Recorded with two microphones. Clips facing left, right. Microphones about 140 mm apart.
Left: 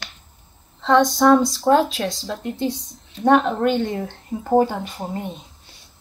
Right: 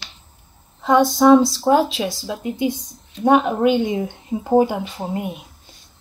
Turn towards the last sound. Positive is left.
turn(degrees=-10)  # may be behind; listen again after turning